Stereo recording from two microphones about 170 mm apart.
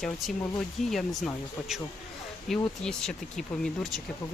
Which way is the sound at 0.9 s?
Centre (ahead or behind).